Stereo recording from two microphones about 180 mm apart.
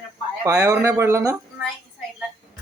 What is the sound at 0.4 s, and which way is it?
Speech, 20° right (ahead or behind).